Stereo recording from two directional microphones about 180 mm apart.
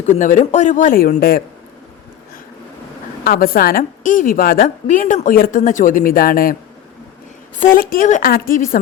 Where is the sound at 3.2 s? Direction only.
55° left (ahead or behind).